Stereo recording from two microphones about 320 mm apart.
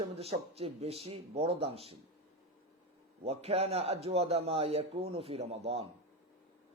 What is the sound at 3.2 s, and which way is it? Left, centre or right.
A man's voice, centre.